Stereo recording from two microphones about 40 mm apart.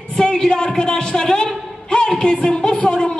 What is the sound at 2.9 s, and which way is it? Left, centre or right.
Speech, left.